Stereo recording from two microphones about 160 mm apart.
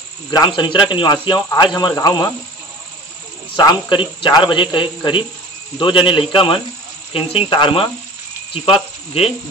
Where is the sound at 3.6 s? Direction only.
30° left (ahead or behind).